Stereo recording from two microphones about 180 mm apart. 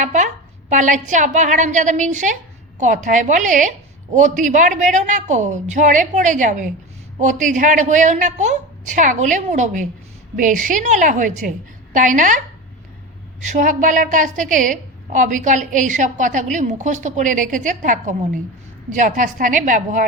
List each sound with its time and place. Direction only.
0.0 s a sound: 45° right (ahead or behind)
0.7 s a woman's voice: 45° right (ahead or behind)
13.4 s a woman's voice: 45° right (ahead or behind)